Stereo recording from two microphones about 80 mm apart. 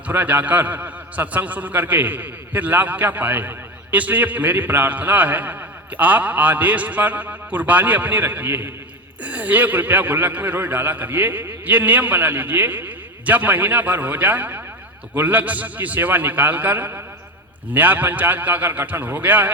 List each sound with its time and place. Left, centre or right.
0.1 s a man's voice: right